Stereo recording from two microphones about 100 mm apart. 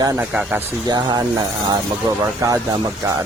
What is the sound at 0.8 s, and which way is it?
Speech, 45° right (ahead or behind).